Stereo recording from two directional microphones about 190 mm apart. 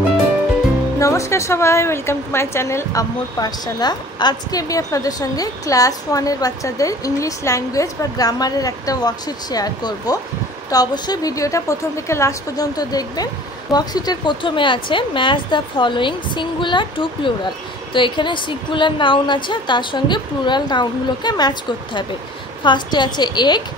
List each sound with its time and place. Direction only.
0.9 s a woman's voice: 15° left (ahead or behind)